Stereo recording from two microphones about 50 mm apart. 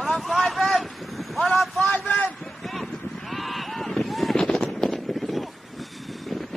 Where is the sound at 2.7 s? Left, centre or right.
Centre.